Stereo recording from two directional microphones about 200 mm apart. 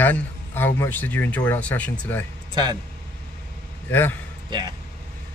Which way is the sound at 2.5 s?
20° right (ahead or behind).